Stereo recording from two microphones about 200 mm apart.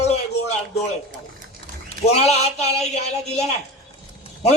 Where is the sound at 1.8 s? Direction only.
30° left (ahead or behind).